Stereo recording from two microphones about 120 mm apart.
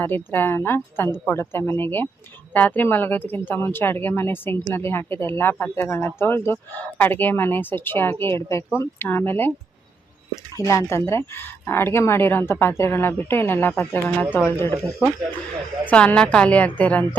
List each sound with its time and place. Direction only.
0.0 s speech: 15° left (ahead or behind)
10.6 s speech: 25° left (ahead or behind)
15.9 s speech: 10° left (ahead or behind)